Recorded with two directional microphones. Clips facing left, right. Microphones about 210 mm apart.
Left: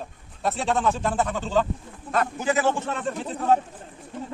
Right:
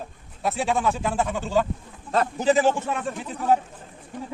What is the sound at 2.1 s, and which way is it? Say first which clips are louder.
Speech: right 3 dB; 30° right (ahead or behind).